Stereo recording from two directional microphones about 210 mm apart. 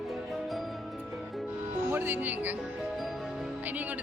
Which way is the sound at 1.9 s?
10° right (ahead or behind).